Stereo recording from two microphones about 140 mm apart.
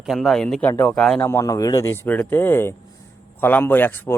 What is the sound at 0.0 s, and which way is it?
A man's voice, centre (ahead or behind).